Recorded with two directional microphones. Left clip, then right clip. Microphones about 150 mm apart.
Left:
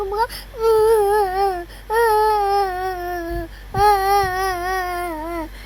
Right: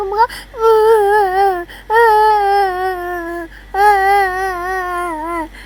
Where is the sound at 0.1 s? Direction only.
10° right (ahead or behind).